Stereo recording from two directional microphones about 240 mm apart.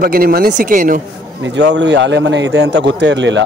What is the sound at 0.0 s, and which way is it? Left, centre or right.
Speech, right.